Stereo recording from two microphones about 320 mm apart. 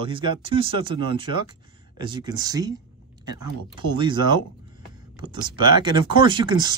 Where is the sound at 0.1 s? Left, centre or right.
Centre.